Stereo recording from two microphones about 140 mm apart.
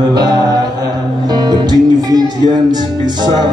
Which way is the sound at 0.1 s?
30° right (ahead or behind).